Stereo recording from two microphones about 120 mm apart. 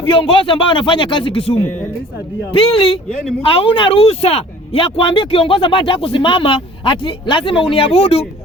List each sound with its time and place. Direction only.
0.0 s speech: 45° left (ahead or behind)